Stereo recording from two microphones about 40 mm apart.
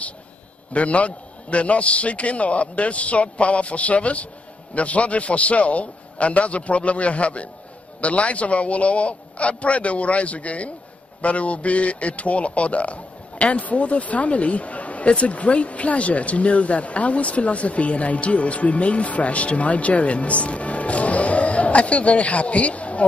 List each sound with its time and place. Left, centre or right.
0.7 s a man's voice: left